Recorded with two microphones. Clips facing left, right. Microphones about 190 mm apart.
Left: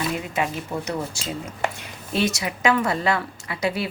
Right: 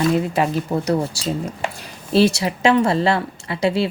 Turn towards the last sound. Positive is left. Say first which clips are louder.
# right 6 dB
turn(degrees=-30)  # may be behind; listen again after turning